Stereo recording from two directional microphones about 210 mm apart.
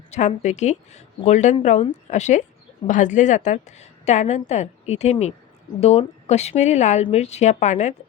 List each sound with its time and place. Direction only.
0.1 s a woman's voice: 35° left (ahead or behind)